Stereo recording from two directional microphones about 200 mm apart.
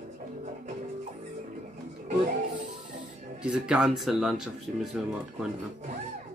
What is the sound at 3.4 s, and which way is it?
Speech, 5° right (ahead or behind).